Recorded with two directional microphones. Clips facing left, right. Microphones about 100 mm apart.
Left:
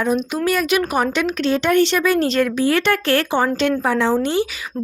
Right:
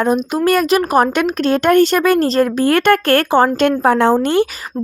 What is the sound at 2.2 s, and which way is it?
Speech, 40° right (ahead or behind).